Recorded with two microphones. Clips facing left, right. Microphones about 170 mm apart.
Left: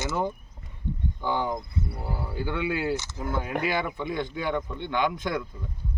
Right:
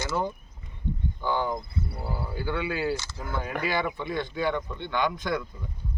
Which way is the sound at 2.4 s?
15° left (ahead or behind).